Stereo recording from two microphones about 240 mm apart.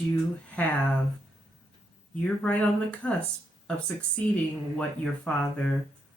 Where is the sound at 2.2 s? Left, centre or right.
Centre.